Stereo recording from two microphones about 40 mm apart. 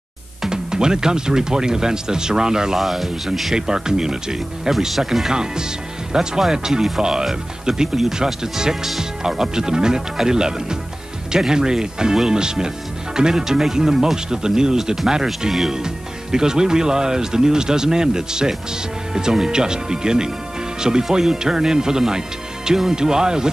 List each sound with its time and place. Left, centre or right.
0.5 s speech: centre
2.8 s speech: centre
3.5 s speech: centre
4.7 s speech: centre
5.3 s speech: centre